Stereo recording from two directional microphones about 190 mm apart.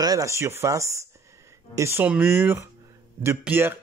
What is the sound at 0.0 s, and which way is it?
Speech, 20° right (ahead or behind).